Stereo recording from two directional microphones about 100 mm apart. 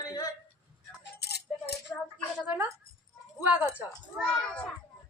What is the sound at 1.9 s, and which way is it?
Speech, 15° left (ahead or behind).